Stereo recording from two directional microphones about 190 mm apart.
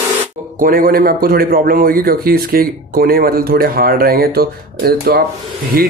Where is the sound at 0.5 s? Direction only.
50° right (ahead or behind).